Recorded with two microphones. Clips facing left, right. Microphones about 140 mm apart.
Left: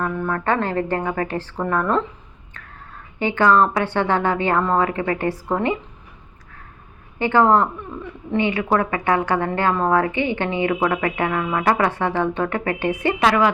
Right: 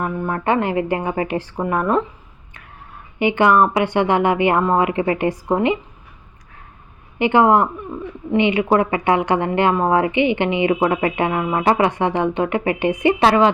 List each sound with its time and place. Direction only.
0.0 s speech: 20° right (ahead or behind)
3.2 s speech: 15° right (ahead or behind)
7.2 s speech: 20° right (ahead or behind)
13.1 s speech: 30° right (ahead or behind)